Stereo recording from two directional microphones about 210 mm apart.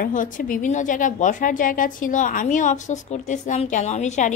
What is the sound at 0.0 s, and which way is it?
A woman's voice, 40° left (ahead or behind).